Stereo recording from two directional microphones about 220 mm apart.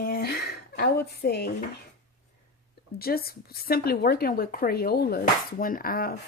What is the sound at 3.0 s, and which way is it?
A woman's voice, 45° left (ahead or behind).